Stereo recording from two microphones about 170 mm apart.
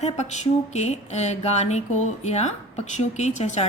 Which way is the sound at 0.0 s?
40° left (ahead or behind).